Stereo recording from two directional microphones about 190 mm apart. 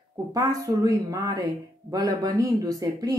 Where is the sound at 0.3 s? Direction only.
20° right (ahead or behind).